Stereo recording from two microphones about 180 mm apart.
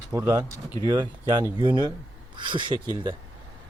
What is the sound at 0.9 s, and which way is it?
Speech, 25° right (ahead or behind).